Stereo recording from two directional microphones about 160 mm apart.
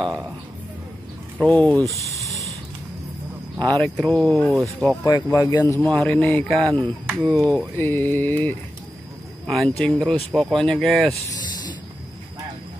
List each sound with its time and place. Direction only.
0.0 s speech: 20° right (ahead or behind)
1.4 s a sound: 10° left (ahead or behind)
3.8 s speech: 5° left (ahead or behind)
5.0 s speech: 20° left (ahead or behind); by 6.7 s centre (ahead or behind)
7.1 s a sound: centre (ahead or behind)
9.5 s speech: 5° left (ahead or behind)